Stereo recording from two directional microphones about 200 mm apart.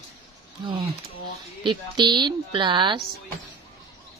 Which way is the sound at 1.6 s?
20° right (ahead or behind).